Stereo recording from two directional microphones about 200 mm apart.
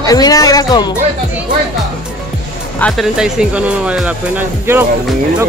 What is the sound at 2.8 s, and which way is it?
Speech, centre (ahead or behind).